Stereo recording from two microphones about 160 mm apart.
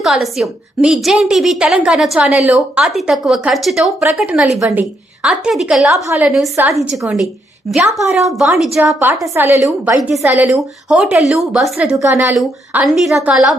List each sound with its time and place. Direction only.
0.0 s a woman's voice: centre (ahead or behind)
5.9 s a woman's voice: 15° right (ahead or behind)
6.2 s a woman's voice: centre (ahead or behind)
9.2 s a woman's voice: 15° right (ahead or behind)
9.6 s a woman's voice: centre (ahead or behind)
12.0 s a woman's voice: 10° right (ahead or behind)
12.4 s a woman's voice: centre (ahead or behind)